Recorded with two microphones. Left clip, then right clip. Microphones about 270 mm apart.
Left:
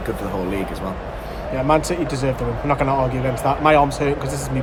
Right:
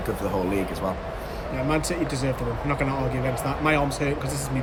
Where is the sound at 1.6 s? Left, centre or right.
Centre.